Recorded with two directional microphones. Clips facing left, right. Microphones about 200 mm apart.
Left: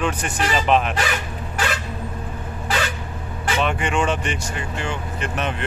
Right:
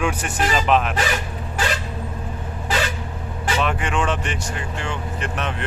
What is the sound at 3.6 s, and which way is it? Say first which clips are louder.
Speech: left 2 dB; centre (ahead or behind).